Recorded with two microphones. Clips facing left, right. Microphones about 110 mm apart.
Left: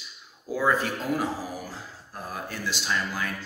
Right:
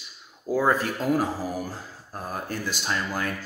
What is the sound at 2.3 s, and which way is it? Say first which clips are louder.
A man's voice: right 2 dB; 45° right (ahead or behind).